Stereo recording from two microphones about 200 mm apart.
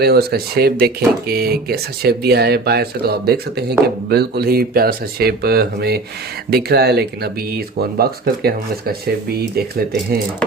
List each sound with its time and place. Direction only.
0.0 s speech: 50° right (ahead or behind)